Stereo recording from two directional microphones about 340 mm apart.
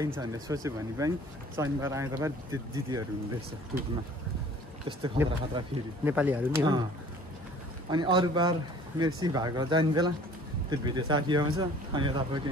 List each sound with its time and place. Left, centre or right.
0.0 s speech: centre
4.8 s speech: centre
7.9 s speech: centre